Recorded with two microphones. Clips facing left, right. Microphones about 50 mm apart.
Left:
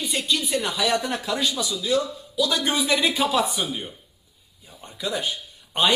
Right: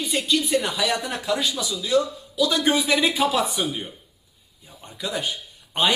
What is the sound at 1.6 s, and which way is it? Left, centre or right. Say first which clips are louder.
A man's voice: right 2 dB; right.